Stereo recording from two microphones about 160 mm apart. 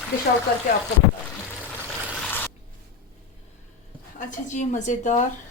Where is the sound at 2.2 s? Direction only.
10° left (ahead or behind).